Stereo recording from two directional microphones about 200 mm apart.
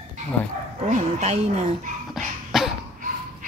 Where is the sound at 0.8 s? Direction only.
35° right (ahead or behind).